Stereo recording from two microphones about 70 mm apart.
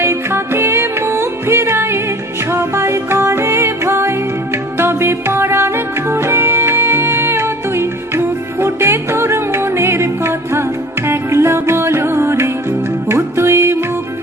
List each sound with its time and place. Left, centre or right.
0.0 s music: right